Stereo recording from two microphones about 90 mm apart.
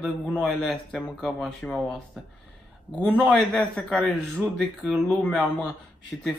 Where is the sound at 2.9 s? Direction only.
15° left (ahead or behind).